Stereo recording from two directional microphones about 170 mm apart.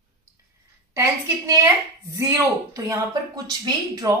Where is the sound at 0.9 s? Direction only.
20° right (ahead or behind).